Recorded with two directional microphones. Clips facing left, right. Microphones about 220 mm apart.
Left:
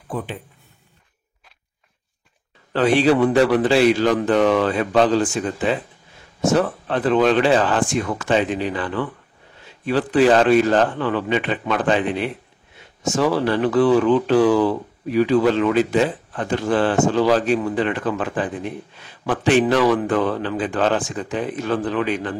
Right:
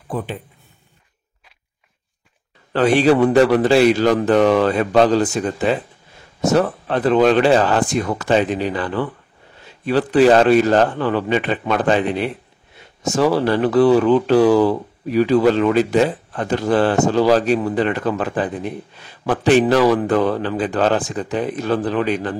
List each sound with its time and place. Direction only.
2.7 s a man's voice: 45° right (ahead or behind)